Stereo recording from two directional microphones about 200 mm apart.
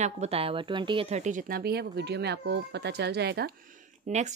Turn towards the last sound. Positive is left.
turn(degrees=-35)  # may be behind; listen again after turning